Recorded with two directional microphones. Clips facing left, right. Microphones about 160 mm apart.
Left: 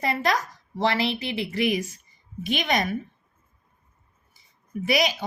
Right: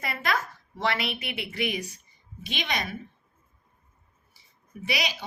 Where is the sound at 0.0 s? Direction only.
35° left (ahead or behind).